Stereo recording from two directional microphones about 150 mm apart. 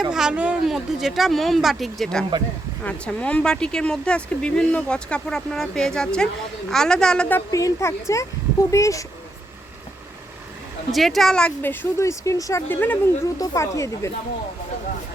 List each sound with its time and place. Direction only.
0.1 s speech: 5° right (ahead or behind); by 9.0 s 20° left (ahead or behind)
10.9 s speech: centre (ahead or behind)
13.4 s speech: 25° left (ahead or behind)